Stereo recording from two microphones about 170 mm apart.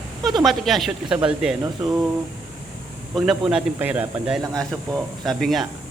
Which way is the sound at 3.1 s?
5° right (ahead or behind).